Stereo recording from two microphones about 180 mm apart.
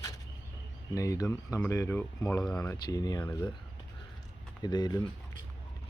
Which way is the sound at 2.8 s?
20° left (ahead or behind).